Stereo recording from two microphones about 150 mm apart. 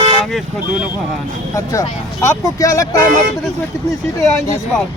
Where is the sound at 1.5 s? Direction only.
20° left (ahead or behind).